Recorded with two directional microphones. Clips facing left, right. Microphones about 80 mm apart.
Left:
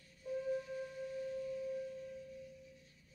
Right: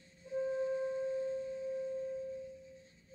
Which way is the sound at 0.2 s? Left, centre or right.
Right.